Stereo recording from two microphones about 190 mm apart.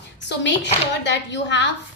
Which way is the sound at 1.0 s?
65° left (ahead or behind).